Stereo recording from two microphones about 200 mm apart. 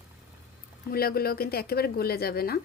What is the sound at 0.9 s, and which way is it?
A woman's voice, 50° left (ahead or behind).